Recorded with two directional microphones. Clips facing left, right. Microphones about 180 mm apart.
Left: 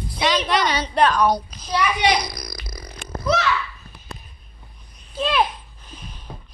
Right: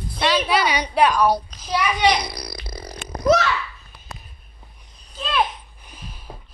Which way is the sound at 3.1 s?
45° right (ahead or behind).